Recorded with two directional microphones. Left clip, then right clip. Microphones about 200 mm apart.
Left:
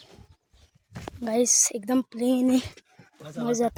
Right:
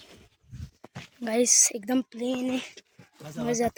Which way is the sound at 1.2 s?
10° left (ahead or behind).